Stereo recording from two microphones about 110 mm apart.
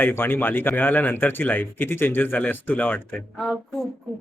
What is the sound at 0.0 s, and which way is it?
Speech, 20° left (ahead or behind).